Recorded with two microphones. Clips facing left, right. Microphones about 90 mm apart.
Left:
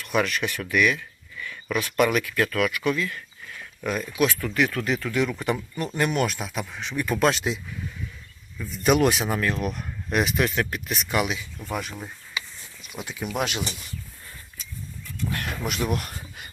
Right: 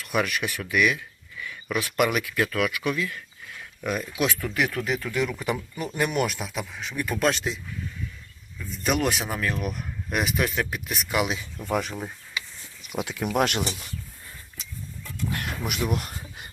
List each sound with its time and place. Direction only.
0.0 s speech: 10° right (ahead or behind)
11.6 s speech: 30° right (ahead or behind)
13.0 s speech: 65° right (ahead or behind)
13.3 s speech: 50° right (ahead or behind)
15.6 s speech: 10° right (ahead or behind)